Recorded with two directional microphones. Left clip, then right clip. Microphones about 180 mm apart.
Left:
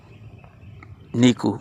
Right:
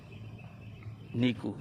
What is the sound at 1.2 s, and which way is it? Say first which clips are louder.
Speech: left 13 dB; 45° left (ahead or behind).